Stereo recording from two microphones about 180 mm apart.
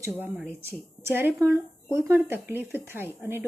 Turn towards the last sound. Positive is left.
turn(degrees=-10)  # may be behind; listen again after turning